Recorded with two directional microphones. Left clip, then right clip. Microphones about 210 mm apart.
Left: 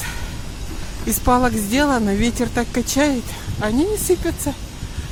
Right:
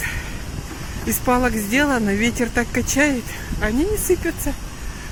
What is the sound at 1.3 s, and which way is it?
Speech, 5° left (ahead or behind).